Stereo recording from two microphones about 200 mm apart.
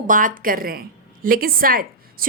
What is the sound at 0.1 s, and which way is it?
A woman's voice, 40° right (ahead or behind).